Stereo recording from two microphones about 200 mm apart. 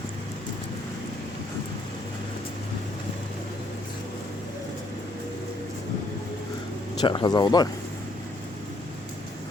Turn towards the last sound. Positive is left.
turn(degrees=20)  # may be behind; listen again after turning